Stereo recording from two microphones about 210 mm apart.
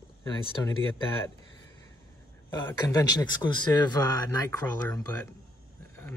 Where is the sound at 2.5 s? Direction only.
15° left (ahead or behind).